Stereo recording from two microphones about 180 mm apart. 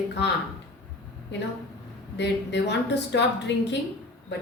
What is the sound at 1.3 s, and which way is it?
A woman's voice, 75° left (ahead or behind).